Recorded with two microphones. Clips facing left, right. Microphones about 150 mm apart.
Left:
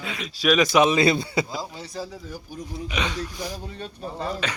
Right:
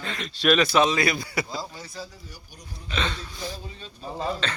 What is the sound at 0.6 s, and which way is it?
Speech, 15° left (ahead or behind).